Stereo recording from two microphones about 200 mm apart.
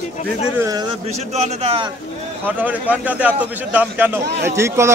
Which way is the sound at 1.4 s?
30° right (ahead or behind).